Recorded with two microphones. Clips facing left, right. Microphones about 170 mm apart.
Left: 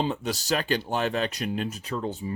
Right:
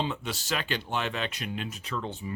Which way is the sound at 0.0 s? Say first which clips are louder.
Left 4 dB; 40° left (ahead or behind).